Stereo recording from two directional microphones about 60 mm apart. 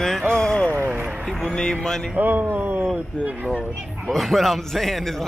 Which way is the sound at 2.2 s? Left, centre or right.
Right.